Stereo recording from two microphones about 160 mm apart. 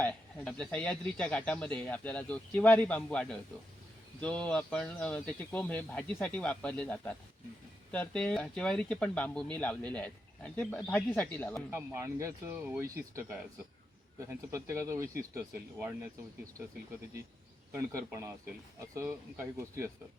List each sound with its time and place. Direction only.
0.0 s a sound: 10° left (ahead or behind)
0.6 s speech: 5° left (ahead or behind)
11.7 s speech: 15° right (ahead or behind)
15.4 s speech: 5° right (ahead or behind)
17.7 s speech: 15° right (ahead or behind)